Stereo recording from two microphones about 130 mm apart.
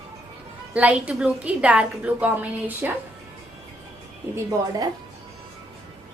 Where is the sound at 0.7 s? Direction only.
10° right (ahead or behind).